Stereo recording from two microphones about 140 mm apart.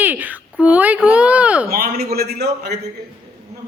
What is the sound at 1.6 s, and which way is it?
Speech, 90° right.